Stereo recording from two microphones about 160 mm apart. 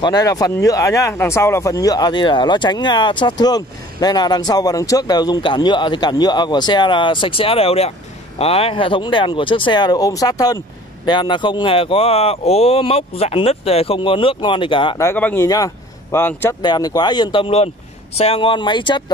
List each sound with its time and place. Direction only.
0.0 s speech: 25° left (ahead or behind)
15.0 s speech: 15° left (ahead or behind)
16.6 s speech: 25° left (ahead or behind)